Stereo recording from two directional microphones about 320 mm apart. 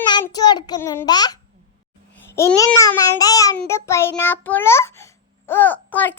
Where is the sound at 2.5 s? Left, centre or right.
Centre.